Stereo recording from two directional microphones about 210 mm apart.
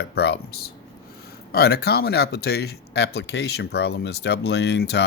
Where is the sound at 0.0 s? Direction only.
55° left (ahead or behind).